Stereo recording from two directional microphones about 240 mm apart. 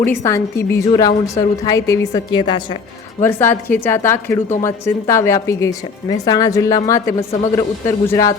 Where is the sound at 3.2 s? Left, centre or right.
Centre.